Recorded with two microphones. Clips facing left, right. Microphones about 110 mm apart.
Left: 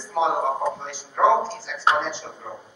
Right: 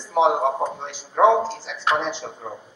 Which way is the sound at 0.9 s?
20° right (ahead or behind).